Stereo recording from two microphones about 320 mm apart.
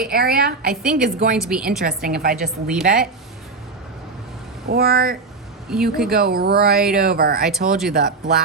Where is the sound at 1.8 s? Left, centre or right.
Right.